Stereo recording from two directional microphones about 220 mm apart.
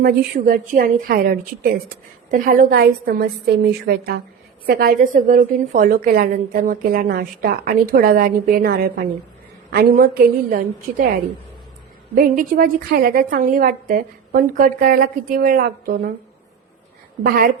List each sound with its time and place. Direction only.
0.0 s a woman's voice: 40° right (ahead or behind)
9.9 s a woman's voice: 40° right (ahead or behind)
12.1 s a woman's voice: 40° right (ahead or behind)
17.2 s a woman's voice: 40° right (ahead or behind)